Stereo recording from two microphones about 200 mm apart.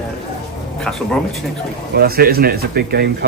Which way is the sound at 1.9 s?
50° right (ahead or behind).